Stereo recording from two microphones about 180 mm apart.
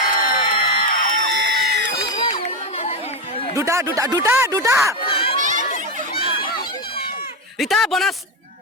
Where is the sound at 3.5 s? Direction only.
15° right (ahead or behind).